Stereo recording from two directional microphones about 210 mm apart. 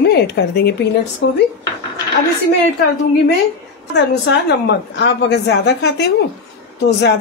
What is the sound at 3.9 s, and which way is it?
A woman's voice, 55° left (ahead or behind).